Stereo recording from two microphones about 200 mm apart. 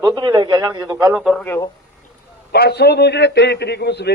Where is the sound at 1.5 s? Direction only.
15° left (ahead or behind).